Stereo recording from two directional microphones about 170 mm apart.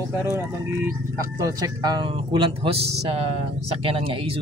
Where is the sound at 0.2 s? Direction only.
15° right (ahead or behind).